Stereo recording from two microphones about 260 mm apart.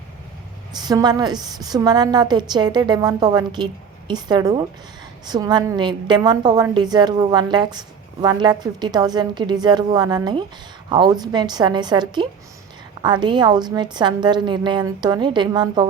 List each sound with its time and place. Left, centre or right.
0.8 s a woman's voice: centre